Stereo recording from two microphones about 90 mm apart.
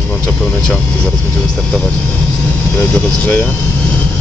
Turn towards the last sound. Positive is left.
turn(degrees=20)  # may be behind; listen again after turning